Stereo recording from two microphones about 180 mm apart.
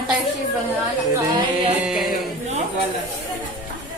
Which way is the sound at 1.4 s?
30° right (ahead or behind).